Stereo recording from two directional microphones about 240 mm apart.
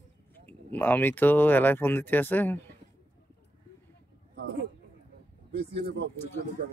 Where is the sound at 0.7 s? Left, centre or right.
Centre.